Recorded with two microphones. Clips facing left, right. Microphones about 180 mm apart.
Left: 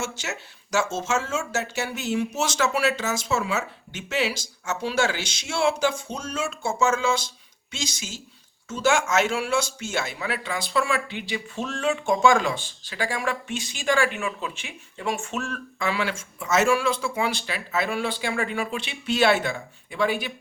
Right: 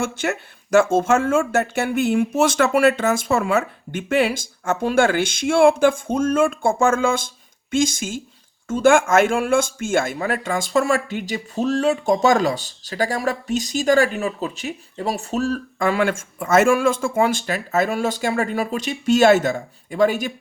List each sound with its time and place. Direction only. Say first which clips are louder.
0.0 s speech: right 8 dB; 55° right (ahead or behind)